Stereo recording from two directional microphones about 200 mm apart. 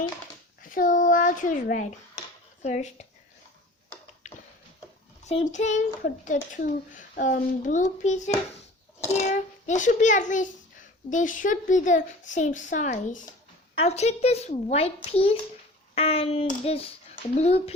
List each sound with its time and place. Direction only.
0.6 s a child's voice: 40° left (ahead or behind)
4.2 s a sound: 35° left (ahead or behind)
5.2 s speech: 35° left (ahead or behind)
16.0 s hands: 30° left (ahead or behind)
17.3 s speech: 30° left (ahead or behind)